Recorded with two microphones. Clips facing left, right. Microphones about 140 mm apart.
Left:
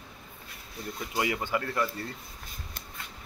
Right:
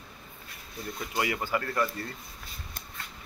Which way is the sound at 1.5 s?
20° left (ahead or behind).